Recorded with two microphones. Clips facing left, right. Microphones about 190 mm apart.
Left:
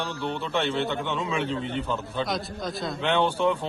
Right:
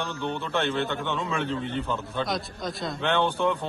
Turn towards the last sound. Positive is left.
turn(degrees=5)  # may be behind; listen again after turning